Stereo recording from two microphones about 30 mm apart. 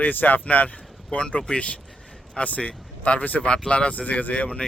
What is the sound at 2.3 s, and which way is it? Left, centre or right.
Speech, left.